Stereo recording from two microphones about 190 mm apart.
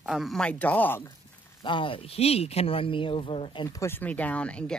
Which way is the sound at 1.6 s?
25° left (ahead or behind).